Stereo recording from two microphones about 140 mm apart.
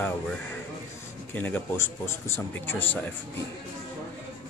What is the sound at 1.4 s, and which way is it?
A man's voice, 10° left (ahead or behind).